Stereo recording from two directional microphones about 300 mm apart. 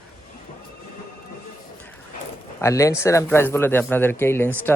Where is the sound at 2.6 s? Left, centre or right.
Centre.